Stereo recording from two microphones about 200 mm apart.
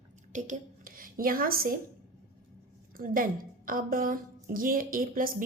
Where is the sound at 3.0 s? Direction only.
45° right (ahead or behind).